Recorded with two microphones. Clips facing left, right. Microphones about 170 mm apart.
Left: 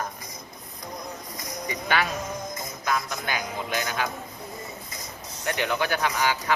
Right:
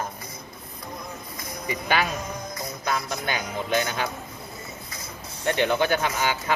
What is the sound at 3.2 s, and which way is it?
Speech, 25° right (ahead or behind).